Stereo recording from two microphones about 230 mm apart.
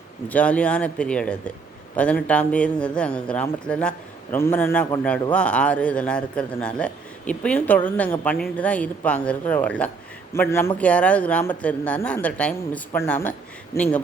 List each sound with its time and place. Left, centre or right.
0.3 s a man's voice: centre